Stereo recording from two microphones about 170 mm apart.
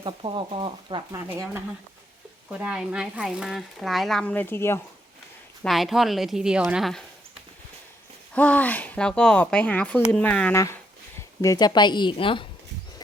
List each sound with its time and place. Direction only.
0.0 s speech: 30° right (ahead or behind)
1.3 s speech: 15° right (ahead or behind); by 4.8 s 15° left (ahead or behind)
5.6 s speech: centre (ahead or behind)
8.3 s speech: 10° left (ahead or behind)
11.4 s a woman's voice: 25° left (ahead or behind)